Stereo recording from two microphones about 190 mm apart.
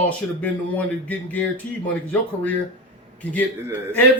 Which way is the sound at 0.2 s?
5° left (ahead or behind).